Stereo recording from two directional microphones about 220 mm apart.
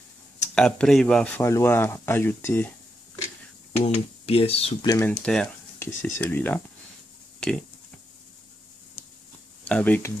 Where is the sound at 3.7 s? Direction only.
30° left (ahead or behind).